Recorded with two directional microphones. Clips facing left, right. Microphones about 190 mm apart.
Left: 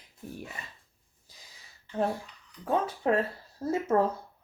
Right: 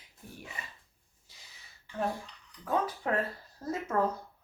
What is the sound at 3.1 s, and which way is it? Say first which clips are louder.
Speech: left 5 dB; 25° left (ahead or behind).